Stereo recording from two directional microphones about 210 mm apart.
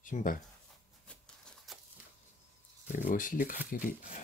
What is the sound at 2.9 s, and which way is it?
Speech, 40° left (ahead or behind).